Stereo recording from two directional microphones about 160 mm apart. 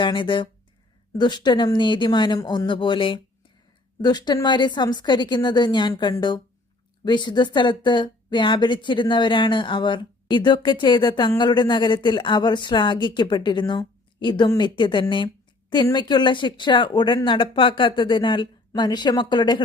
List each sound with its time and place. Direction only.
0.0 s speech: 30° left (ahead or behind)